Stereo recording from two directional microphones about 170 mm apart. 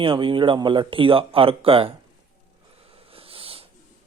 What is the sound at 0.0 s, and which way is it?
A man's voice, 30° right (ahead or behind).